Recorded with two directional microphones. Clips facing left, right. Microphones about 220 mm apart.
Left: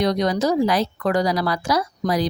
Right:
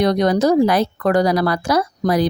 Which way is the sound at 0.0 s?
55° right (ahead or behind).